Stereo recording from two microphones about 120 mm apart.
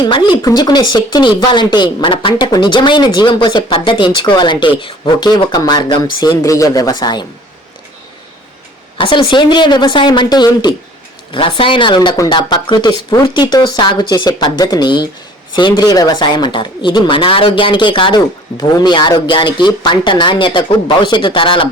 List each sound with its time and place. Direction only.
0.0 s speech: 40° left (ahead or behind)
9.0 s speech: 45° left (ahead or behind)